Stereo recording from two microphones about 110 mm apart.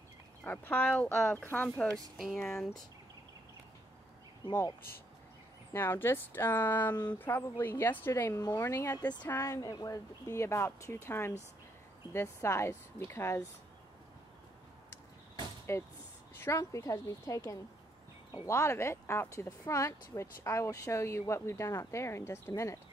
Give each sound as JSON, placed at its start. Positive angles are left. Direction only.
{"t": 0.4, "sound": "speech", "side_deg": 15}
{"t": 2.1, "sound": "speech", "side_deg": 0}
{"t": 4.5, "sound": "speech", "side_deg": 40}
{"t": 5.7, "sound": "speech", "side_deg": 20}
{"t": 8.5, "sound": "speech", "side_deg": 35}
{"t": 8.7, "sound": "speech", "side_deg": 25}
{"t": 15.7, "sound": "speech", "side_deg": 25}